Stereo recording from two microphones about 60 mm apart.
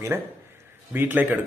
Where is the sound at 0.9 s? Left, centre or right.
Right.